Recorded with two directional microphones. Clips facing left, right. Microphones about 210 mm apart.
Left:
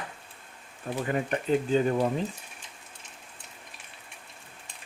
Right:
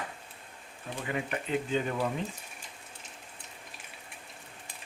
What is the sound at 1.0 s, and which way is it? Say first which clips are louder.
Speech: left 5 dB; 40° left (ahead or behind).